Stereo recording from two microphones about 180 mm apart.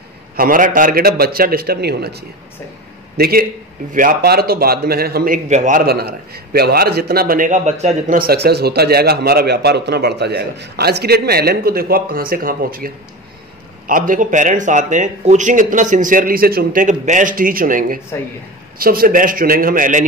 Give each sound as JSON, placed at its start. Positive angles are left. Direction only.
{"t": 0.4, "sound": "a man's voice", "side_deg": -50}